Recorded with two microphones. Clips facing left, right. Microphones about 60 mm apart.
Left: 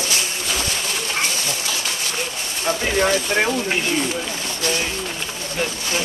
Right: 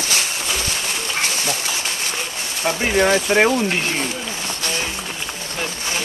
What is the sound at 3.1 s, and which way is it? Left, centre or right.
Speech, right.